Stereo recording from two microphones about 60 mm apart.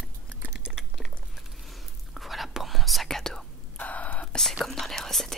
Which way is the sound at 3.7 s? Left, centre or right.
Left.